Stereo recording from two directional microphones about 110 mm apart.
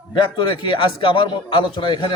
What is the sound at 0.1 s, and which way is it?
A man's voice, 45° left (ahead or behind).